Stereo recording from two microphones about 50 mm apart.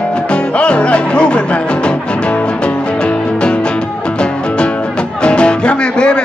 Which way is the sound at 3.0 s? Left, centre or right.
Left.